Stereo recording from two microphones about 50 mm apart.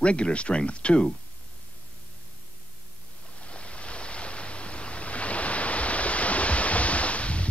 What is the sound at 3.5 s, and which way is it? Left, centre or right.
Ocean, left.